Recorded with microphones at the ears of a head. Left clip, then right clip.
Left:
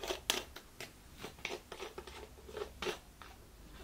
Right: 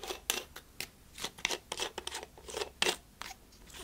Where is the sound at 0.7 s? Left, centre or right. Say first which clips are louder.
Right 9 dB; right.